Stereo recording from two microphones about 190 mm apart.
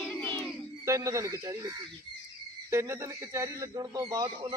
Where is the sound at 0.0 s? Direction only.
10° left (ahead or behind).